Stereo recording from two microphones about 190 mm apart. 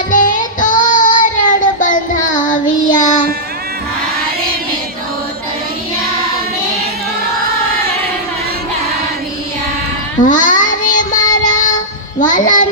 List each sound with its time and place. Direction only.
0.1 s child singing: 45° left (ahead or behind)
10.2 s child singing: 45° left (ahead or behind)
12.2 s a child's voice: 45° left (ahead or behind)